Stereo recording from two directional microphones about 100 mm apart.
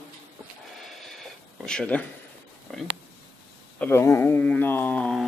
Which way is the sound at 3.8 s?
25° left (ahead or behind).